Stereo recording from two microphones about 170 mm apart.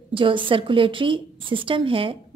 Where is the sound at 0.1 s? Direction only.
30° right (ahead or behind).